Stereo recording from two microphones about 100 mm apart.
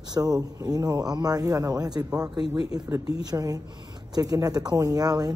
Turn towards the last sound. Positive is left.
turn(degrees=-40)  # may be behind; listen again after turning